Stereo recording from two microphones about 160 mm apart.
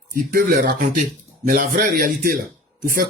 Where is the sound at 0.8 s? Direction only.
50° right (ahead or behind).